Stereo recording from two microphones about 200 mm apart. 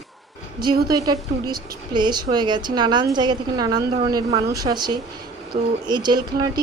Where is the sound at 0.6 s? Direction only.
20° right (ahead or behind).